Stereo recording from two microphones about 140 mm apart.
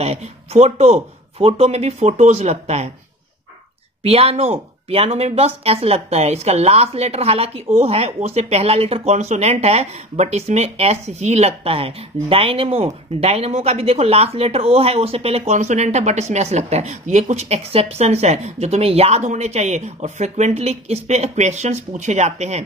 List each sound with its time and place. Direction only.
0.0 s speech: 50° right (ahead or behind)
4.0 s speech: 45° right (ahead or behind)